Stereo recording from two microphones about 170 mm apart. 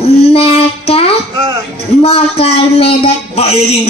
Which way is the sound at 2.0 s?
35° left (ahead or behind).